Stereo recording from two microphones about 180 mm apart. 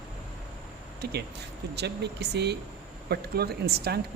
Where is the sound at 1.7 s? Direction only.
70° right (ahead or behind).